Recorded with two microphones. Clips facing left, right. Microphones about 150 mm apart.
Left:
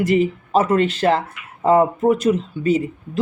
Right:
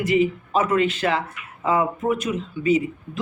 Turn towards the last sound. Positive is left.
turn(degrees=35)  # may be behind; listen again after turning